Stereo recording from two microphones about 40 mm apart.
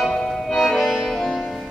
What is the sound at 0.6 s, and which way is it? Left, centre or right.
Music, centre.